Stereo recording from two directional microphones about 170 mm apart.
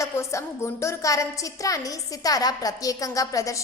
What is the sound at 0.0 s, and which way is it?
A woman's voice, 15° left (ahead or behind).